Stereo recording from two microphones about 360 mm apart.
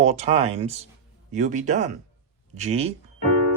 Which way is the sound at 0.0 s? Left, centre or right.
Centre.